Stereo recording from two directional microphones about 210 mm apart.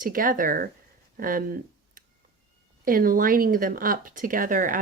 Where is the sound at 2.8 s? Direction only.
40° right (ahead or behind).